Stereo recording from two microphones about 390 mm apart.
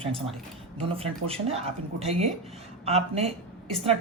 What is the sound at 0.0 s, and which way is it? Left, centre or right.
A woman's voice, centre.